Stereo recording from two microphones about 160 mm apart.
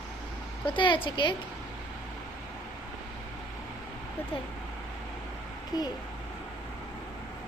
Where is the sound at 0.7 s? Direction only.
30° left (ahead or behind).